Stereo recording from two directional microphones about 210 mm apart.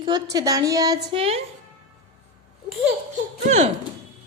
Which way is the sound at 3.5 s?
30° right (ahead or behind).